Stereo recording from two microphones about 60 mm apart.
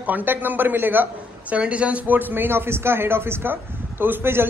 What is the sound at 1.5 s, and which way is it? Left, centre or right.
A man's voice, right.